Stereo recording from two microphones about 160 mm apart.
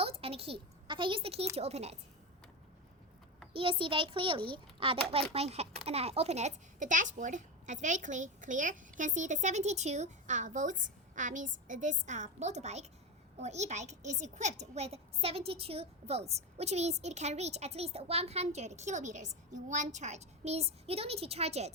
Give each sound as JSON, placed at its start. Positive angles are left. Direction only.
{"t": 0.0, "sound": "a woman's voice", "side_deg": -35}
{"t": 3.5, "sound": "a child's voice", "side_deg": -35}